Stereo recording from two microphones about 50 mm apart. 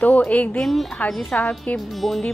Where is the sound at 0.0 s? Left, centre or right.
Left.